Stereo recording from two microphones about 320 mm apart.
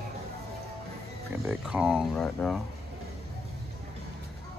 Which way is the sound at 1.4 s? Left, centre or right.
Centre.